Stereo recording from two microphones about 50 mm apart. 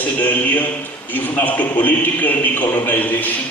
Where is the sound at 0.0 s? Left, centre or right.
Left.